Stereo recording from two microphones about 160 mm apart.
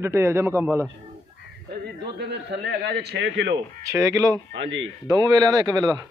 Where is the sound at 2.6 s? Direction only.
90° right.